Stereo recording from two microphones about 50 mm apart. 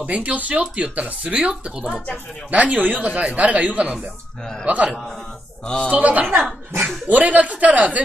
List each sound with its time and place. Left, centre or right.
0.0 s speech: right
2.5 s speech: right